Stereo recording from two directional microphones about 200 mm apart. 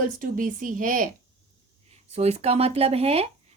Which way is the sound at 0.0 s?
45° right (ahead or behind).